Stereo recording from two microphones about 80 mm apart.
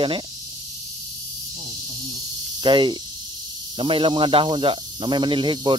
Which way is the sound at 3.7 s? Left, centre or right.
Right.